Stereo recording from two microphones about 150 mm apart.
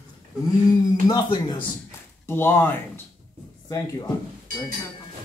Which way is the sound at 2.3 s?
15° left (ahead or behind).